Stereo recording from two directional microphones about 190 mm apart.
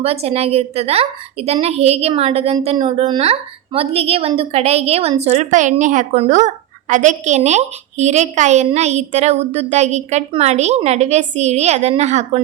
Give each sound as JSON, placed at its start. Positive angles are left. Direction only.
{"t": 0.0, "sound": "a woman's voice", "side_deg": -35}